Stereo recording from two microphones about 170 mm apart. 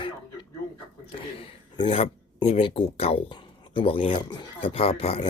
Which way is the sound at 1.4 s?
25° left (ahead or behind).